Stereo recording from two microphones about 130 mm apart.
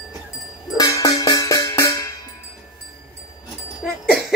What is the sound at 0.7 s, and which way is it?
Music, 25° left (ahead or behind).